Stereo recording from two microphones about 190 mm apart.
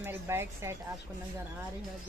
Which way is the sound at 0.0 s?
10° right (ahead or behind).